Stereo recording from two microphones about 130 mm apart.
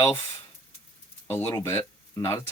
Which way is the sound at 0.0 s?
25° left (ahead or behind).